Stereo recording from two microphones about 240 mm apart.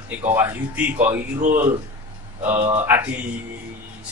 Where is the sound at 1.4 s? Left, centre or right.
Right.